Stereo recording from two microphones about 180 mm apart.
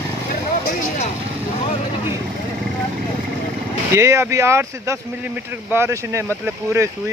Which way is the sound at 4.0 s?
15° right (ahead or behind).